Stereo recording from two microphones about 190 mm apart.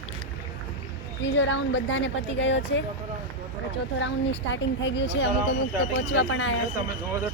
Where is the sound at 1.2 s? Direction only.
75° left (ahead or behind).